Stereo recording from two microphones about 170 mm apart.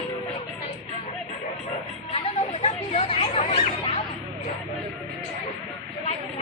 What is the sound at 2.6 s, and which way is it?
Chatter, 35° left (ahead or behind).